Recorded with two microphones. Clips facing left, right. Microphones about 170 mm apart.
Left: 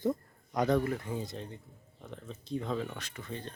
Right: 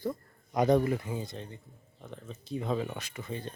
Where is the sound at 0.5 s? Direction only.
15° right (ahead or behind).